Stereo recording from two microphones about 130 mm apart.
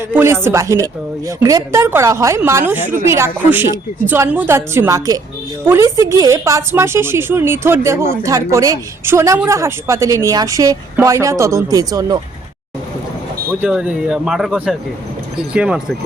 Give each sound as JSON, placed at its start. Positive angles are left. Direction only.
{"t": 0.0, "sound": "a woman's voice", "side_deg": -20}
{"t": 13.6, "sound": "speech", "side_deg": -10}